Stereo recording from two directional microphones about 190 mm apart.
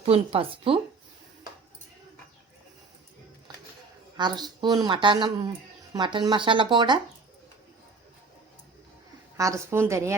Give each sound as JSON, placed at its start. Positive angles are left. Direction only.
{"t": 0.0, "sound": "a woman's voice", "side_deg": -30}
{"t": 4.2, "sound": "speech", "side_deg": -20}
{"t": 9.4, "sound": "a woman's voice", "side_deg": -15}